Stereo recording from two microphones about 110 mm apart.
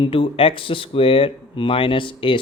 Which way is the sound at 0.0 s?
55° left (ahead or behind).